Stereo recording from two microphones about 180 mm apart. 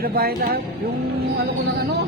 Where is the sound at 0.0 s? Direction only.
55° right (ahead or behind).